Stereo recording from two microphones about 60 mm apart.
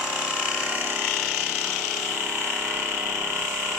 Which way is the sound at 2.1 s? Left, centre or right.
Centre.